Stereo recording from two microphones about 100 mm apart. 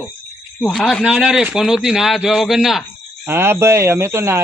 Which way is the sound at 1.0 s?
5° right (ahead or behind).